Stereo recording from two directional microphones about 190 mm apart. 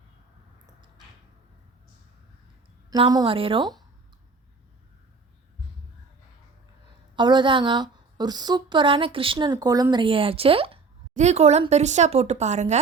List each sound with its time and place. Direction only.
2.9 s a woman's voice: 20° right (ahead or behind)
7.2 s a woman's voice: 25° right (ahead or behind)